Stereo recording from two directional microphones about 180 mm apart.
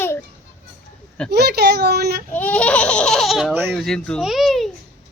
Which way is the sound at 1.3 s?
65° right (ahead or behind).